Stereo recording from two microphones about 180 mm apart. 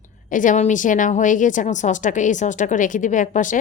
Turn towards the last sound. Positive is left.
turn(degrees=45)  # may be behind; listen again after turning